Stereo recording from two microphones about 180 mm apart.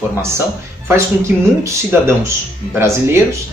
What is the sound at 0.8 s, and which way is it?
Speech, 15° right (ahead or behind).